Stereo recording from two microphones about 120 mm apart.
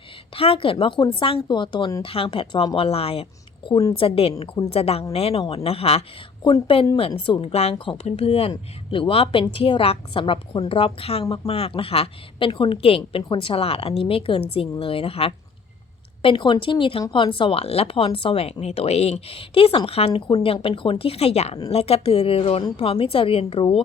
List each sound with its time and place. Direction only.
0.3 s speech: 50° left (ahead or behind)